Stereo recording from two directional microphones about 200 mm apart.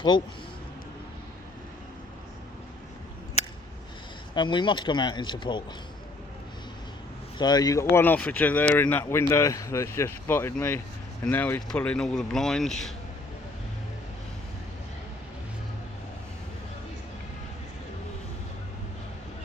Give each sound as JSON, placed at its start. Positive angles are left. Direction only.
{"t": 0.1, "sound": "speech", "side_deg": 25}
{"t": 4.4, "sound": "speech", "side_deg": 25}
{"t": 7.3, "sound": "speech", "side_deg": 20}